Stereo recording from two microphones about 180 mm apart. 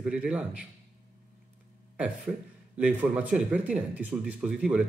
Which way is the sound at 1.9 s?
5° right (ahead or behind).